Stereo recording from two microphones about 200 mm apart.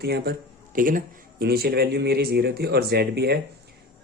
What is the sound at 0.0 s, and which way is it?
Speech, 50° right (ahead or behind).